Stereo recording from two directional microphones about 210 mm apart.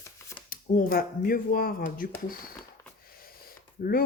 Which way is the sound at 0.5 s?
45° left (ahead or behind).